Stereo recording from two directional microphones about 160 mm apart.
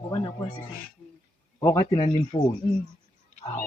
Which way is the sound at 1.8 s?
30° left (ahead or behind).